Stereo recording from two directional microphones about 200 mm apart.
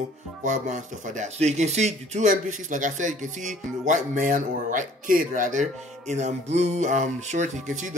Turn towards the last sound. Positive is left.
turn(degrees=-40)  # may be behind; listen again after turning